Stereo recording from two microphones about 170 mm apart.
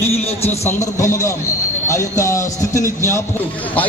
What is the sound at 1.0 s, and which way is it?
Speech, 15° left (ahead or behind).